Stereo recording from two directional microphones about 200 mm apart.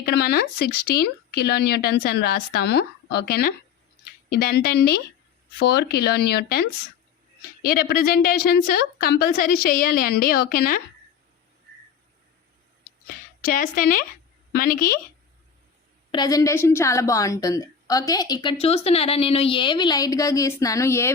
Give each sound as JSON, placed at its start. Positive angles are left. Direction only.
{"t": 0.0, "sound": "speech", "side_deg": 50}
{"t": 13.4, "sound": "speech", "side_deg": 45}
{"t": 16.1, "sound": "a woman's voice", "side_deg": 20}